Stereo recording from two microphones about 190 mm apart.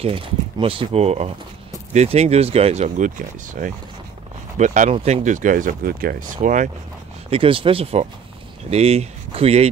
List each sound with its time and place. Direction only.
0.0 s speech: 30° right (ahead or behind)
7.2 s speech: 30° right (ahead or behind)